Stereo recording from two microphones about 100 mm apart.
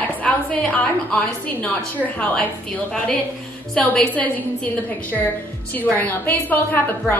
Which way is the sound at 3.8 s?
5° left (ahead or behind).